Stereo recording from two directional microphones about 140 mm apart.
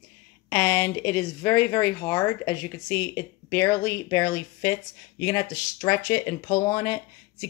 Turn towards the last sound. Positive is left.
turn(degrees=25)  # may be behind; listen again after turning